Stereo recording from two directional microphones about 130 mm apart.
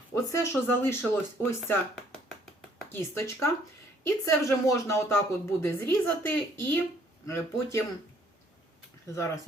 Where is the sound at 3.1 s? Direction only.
20° left (ahead or behind).